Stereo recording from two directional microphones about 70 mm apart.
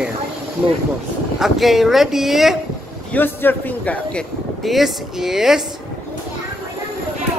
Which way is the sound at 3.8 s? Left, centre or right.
Centre.